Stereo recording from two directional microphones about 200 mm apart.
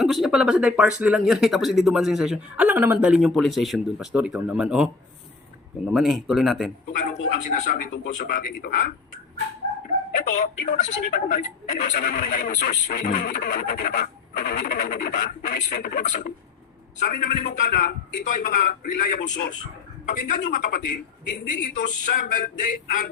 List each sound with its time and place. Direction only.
0.0 s speech: centre (ahead or behind)
6.9 s a sound: 40° left (ahead or behind)
7.3 s speech: 40° left (ahead or behind)
10.8 s speech: 40° left (ahead or behind)
19.3 s speech: 60° left (ahead or behind)
20.1 s speech: 40° left (ahead or behind)